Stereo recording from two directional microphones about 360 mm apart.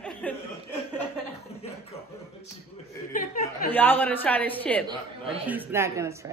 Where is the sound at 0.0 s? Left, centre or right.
Centre.